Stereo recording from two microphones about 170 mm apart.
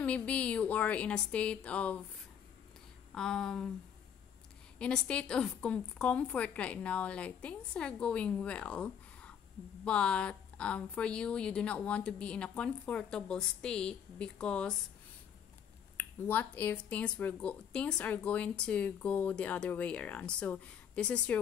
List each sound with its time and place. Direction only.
0.0 s speech: 5° left (ahead or behind)
3.2 s speech: 5° left (ahead or behind)
4.7 s speech: 5° left (ahead or behind)
16.0 s speech: 10° left (ahead or behind)